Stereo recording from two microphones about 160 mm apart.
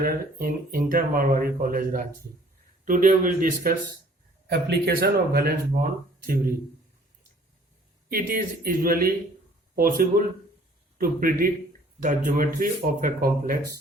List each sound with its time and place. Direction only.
0.0 s speech: 65° right (ahead or behind)
4.4 s speech: 80° right; by 6.4 s 60° right (ahead or behind)
8.1 s speech: 65° right (ahead or behind)
10.9 s speech: 65° right (ahead or behind)